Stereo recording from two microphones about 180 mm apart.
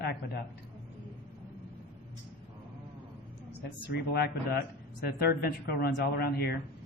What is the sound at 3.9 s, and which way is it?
Speech, 60° left (ahead or behind).